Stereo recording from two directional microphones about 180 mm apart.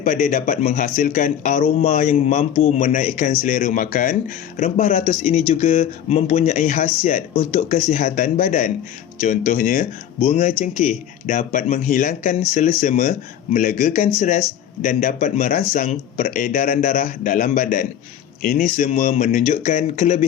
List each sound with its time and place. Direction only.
0.0 s speech: 45° left (ahead or behind)